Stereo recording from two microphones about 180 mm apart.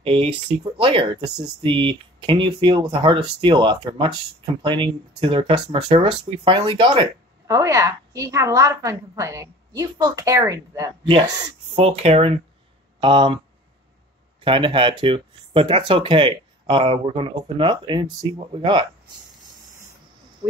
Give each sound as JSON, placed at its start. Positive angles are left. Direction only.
{"t": 0.0, "sound": "speech", "side_deg": -30}
{"t": 11.7, "sound": "speech", "side_deg": -35}
{"t": 14.4, "sound": "speech", "side_deg": -30}